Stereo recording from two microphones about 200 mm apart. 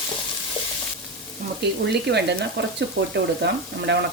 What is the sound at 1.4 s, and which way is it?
Frying, 40° right (ahead or behind).